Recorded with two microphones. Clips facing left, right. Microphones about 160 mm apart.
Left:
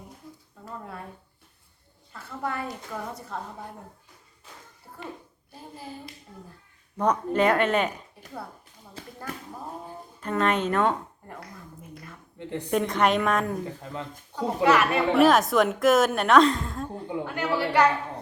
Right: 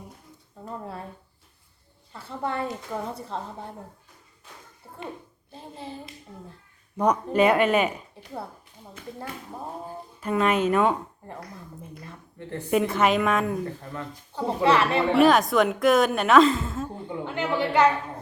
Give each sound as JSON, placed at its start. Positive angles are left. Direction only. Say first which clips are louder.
{"t": 2.1, "sound": "a woman's voice", "louder": "right 2 dB", "side_deg": -25}
{"t": 5.5, "sound": "hands", "louder": "right 2 dB", "side_deg": -25}
{"t": 6.9, "sound": "speech", "louder": "right 2 dB", "side_deg": -10}
{"t": 9.0, "sound": "speech", "louder": "right 3 dB", "side_deg": 30}
{"t": 10.2, "sound": "speech", "louder": "right 2 dB", "side_deg": -10}
{"t": 12.4, "sound": "a woman's voice", "louder": "left 2 dB", "side_deg": 15}
{"t": 12.7, "sound": "a woman's voice", "louder": "right 2 dB", "side_deg": -5}
{"t": 14.3, "sound": "a woman's voice", "louder": "even", "side_deg": -30}
{"t": 15.1, "sound": "a woman's voice", "louder": "even", "side_deg": 0}
{"t": 17.2, "sound": "a woman's voice", "louder": "right 2 dB", "side_deg": -20}